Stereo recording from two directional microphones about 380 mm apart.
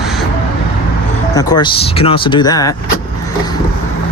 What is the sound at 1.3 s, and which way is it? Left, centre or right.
Speech, centre.